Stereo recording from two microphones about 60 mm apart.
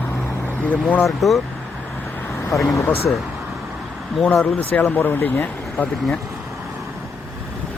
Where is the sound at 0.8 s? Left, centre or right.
Left.